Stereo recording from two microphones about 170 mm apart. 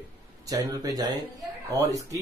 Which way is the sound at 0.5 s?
20° right (ahead or behind).